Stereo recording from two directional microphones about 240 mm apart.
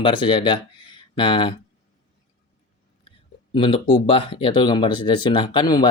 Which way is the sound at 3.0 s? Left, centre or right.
Left.